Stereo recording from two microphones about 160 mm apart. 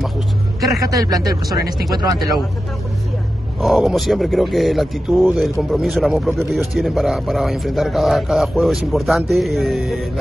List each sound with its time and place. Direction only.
0.7 s speech: 20° right (ahead or behind)
3.6 s speech: centre (ahead or behind)